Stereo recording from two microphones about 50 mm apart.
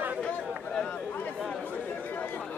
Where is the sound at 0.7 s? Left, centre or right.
Centre.